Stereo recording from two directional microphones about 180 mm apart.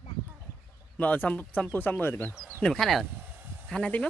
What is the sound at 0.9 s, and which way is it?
Speech, 10° left (ahead or behind).